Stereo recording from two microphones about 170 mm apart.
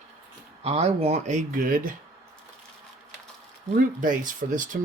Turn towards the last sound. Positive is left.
turn(degrees=-50)  # may be behind; listen again after turning